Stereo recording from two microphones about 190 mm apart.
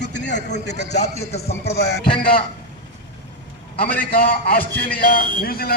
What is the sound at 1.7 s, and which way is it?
Speech, 60° left (ahead or behind).